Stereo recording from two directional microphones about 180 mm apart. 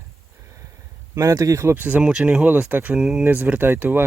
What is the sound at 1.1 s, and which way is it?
Speech, 15° right (ahead or behind).